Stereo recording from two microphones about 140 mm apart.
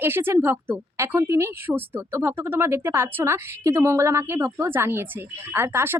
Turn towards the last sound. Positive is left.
turn(degrees=-15)  # may be behind; listen again after turning